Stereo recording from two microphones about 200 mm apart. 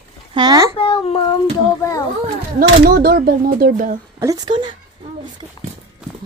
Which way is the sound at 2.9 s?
50° right (ahead or behind).